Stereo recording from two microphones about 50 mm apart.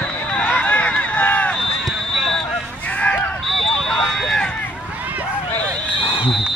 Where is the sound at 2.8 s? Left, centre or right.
Left.